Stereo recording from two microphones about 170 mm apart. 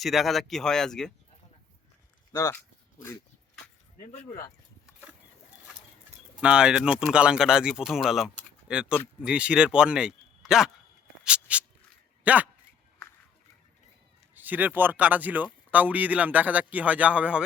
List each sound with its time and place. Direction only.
0.0 s speech: centre (ahead or behind)
2.3 s speech: 20° left (ahead or behind)
6.4 s a man's voice: 5° right (ahead or behind)
11.2 s a sound: 5° right (ahead or behind)
12.2 s speech: 10° right (ahead or behind)
14.3 s a man's voice: 10° right (ahead or behind)